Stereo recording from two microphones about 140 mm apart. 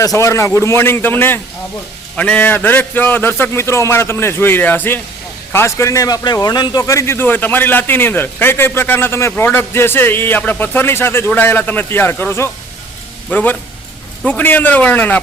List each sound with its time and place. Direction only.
0.0 s a man's voice: 25° left (ahead or behind)